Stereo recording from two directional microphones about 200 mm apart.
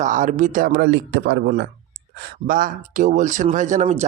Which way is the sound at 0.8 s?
60° right (ahead or behind).